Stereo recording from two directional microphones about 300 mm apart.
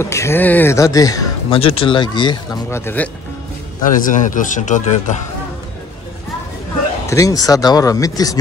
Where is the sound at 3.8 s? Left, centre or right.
Left.